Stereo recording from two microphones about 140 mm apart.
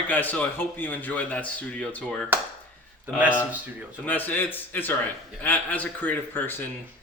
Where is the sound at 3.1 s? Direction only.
15° right (ahead or behind).